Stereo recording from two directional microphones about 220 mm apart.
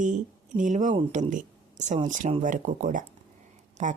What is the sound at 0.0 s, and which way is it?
A woman's voice, 35° right (ahead or behind).